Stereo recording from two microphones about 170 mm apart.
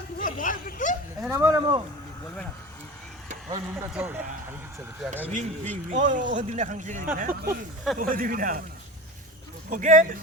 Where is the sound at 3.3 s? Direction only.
40° right (ahead or behind).